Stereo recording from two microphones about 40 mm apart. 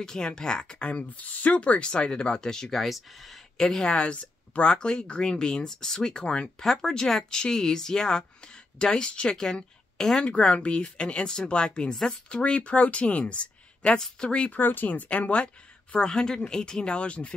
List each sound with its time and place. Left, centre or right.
0.0 s speech: centre
1.1 s speech: left; by 2.7 s centre
2.7 s speech: centre
3.5 s speech: centre
3.8 s speech: left
6.6 s speech: centre
10.2 s speech: left
11.9 s speech: centre
12.3 s speech: left
14.5 s speech: left
15.0 s speech: left
16.0 s speech: centre